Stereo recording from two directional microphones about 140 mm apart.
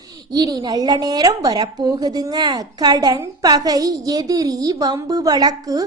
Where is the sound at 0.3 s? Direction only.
30° right (ahead or behind).